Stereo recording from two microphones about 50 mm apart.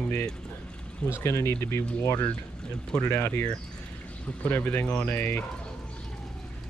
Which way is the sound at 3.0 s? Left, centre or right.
Left.